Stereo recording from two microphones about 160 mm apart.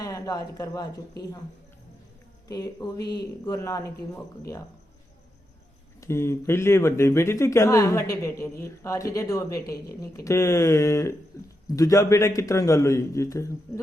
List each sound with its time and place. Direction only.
0.0 s speech: 20° left (ahead or behind)
2.5 s a man's voice: 25° left (ahead or behind)
6.0 s a man's voice: 15° left (ahead or behind)